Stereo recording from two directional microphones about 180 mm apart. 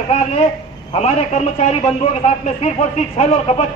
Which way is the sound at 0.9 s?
40° left (ahead or behind).